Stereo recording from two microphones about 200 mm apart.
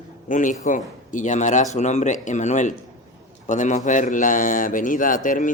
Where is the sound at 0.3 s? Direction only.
40° left (ahead or behind).